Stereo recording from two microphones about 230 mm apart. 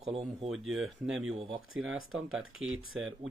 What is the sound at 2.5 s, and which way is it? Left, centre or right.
Speech, right.